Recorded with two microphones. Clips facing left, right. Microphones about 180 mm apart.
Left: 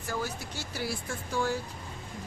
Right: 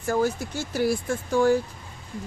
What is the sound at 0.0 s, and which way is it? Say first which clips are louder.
Speech: right 11 dB; 50° right (ahead or behind).